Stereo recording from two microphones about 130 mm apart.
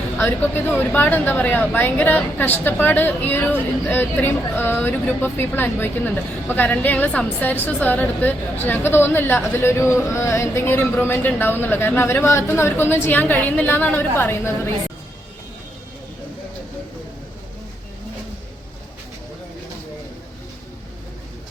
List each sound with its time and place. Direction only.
0.2 s a woman's voice: 15° left (ahead or behind)